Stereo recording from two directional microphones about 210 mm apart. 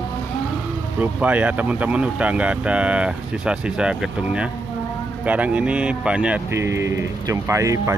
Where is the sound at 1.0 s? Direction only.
5° right (ahead or behind).